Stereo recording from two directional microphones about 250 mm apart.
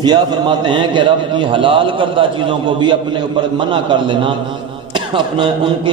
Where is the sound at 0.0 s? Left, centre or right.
Centre.